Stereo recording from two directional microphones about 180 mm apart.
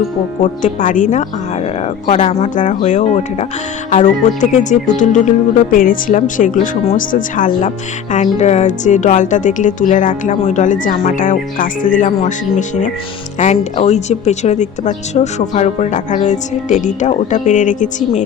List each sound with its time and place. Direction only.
0.4 s speech: 45° left (ahead or behind)